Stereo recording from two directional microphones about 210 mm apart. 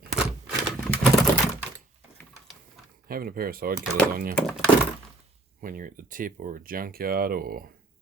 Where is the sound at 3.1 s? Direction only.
45° right (ahead or behind).